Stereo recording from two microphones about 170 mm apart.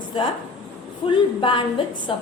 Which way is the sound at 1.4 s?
30° left (ahead or behind).